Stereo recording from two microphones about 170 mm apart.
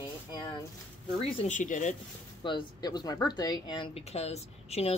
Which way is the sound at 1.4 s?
45° left (ahead or behind).